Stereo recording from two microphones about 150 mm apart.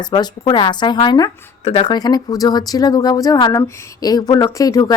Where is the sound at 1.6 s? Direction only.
40° left (ahead or behind).